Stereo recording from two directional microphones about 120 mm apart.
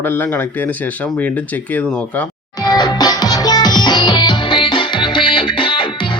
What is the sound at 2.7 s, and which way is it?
Music, 35° left (ahead or behind).